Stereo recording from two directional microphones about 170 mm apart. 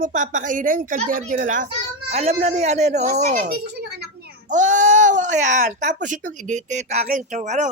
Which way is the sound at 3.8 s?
75° right (ahead or behind).